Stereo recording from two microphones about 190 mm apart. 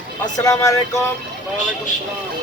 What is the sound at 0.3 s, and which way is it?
Speech, 20° left (ahead or behind).